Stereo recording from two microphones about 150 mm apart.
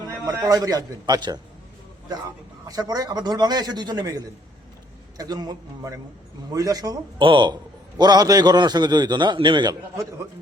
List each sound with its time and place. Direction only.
0.3 s a man's voice: 25° right (ahead or behind)
2.6 s a man's voice: 25° right (ahead or behind)